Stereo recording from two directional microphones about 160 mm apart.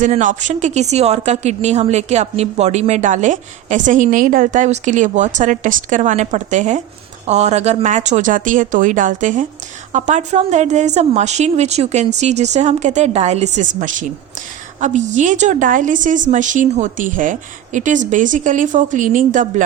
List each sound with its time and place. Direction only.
0.0 s a woman's voice: 50° right (ahead or behind)